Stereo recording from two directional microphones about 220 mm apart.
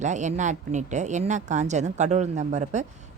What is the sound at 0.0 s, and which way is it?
A woman's voice, 35° right (ahead or behind).